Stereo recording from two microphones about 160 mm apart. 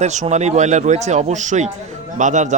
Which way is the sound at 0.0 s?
45° right (ahead or behind).